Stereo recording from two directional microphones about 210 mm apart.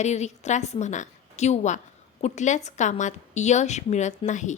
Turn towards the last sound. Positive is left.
turn(degrees=35)  # may be behind; listen again after turning